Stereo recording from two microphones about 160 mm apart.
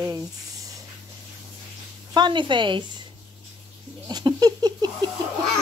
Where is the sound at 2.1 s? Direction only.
30° right (ahead or behind).